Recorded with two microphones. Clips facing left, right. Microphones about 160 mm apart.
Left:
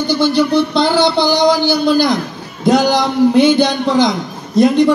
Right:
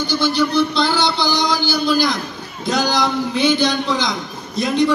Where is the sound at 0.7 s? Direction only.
55° left (ahead or behind).